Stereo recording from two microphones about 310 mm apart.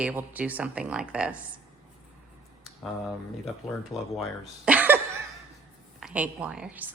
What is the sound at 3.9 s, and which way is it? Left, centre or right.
Speech, centre.